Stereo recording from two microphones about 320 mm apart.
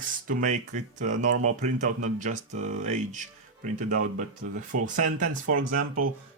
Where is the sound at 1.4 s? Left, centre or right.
Right.